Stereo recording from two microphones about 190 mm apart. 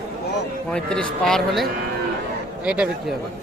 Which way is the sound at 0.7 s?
5° left (ahead or behind).